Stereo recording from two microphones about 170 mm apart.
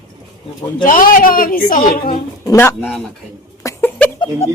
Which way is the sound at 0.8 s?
55° left (ahead or behind).